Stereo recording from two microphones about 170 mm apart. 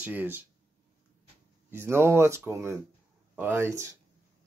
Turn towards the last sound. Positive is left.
turn(degrees=-15)  # may be behind; listen again after turning